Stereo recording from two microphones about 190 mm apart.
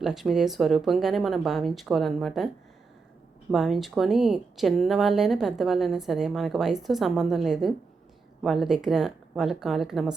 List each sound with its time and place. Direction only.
0.0 s speech: centre (ahead or behind)
3.5 s speech: centre (ahead or behind)